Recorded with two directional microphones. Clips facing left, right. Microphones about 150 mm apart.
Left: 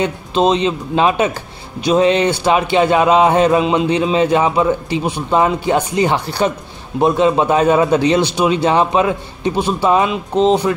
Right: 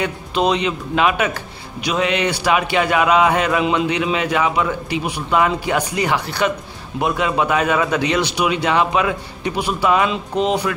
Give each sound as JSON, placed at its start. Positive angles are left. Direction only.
{"t": 0.0, "sound": "speech", "side_deg": 25}